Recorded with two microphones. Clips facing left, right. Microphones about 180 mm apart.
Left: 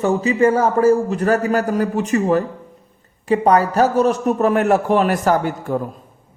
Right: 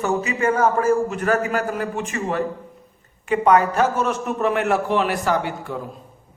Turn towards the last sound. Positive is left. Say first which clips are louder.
# left 5 dB
turn(degrees=45)  # may be behind; listen again after turning